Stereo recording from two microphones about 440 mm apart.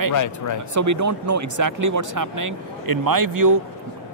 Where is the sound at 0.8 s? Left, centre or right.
Right.